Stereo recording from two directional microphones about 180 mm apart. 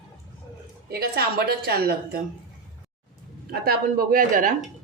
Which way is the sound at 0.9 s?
60° right (ahead or behind).